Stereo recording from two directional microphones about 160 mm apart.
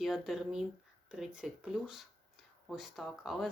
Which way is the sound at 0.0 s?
Centre (ahead or behind).